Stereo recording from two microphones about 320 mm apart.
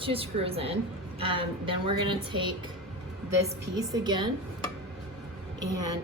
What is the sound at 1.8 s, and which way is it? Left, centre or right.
A woman's voice, centre.